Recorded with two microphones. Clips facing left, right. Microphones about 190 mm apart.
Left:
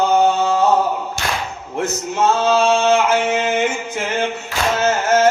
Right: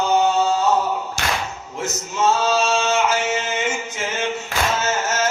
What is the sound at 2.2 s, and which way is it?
Male singing, 55° left (ahead or behind).